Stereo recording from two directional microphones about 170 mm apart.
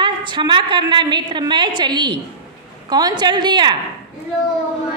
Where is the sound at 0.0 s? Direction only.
30° right (ahead or behind).